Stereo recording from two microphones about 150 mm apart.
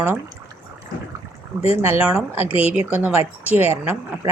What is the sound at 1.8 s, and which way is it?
Speech, 15° right (ahead or behind).